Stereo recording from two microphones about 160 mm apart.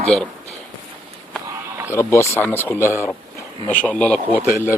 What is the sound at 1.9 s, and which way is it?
Speech, 15° left (ahead or behind).